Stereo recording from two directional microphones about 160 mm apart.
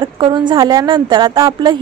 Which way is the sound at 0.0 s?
30° right (ahead or behind).